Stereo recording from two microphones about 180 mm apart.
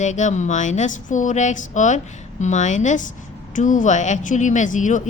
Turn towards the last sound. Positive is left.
turn(degrees=45)  # may be behind; listen again after turning